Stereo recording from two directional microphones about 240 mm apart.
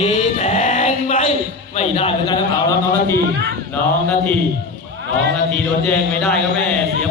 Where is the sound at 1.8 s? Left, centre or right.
Left.